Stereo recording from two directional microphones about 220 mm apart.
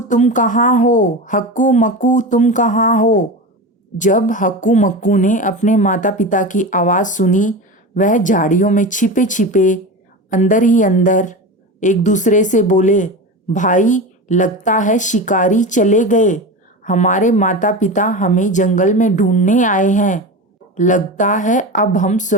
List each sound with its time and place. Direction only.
0.1 s speech: 35° left (ahead or behind)